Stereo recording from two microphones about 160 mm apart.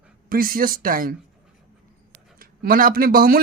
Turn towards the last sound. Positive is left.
turn(degrees=-65)  # may be behind; listen again after turning